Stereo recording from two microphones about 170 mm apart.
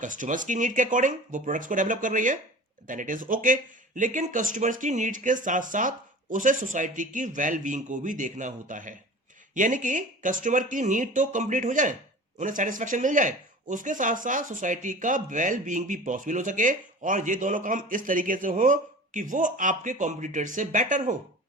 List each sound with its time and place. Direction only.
0.0 s speech: 50° right (ahead or behind)